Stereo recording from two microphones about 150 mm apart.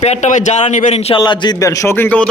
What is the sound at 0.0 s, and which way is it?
Speech, 50° left (ahead or behind).